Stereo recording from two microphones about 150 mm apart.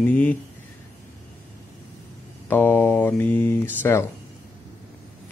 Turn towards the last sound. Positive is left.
turn(degrees=15)  # may be behind; listen again after turning